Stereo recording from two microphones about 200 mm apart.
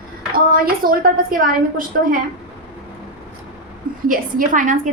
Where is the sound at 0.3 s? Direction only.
45° right (ahead or behind).